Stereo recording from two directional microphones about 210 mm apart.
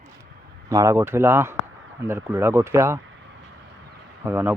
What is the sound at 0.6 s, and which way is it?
Speech, 15° right (ahead or behind).